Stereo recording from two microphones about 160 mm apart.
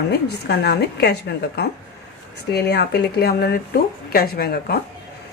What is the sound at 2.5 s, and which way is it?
A woman's voice, 90° left.